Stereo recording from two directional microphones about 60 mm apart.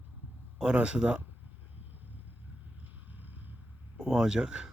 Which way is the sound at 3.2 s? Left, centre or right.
Right.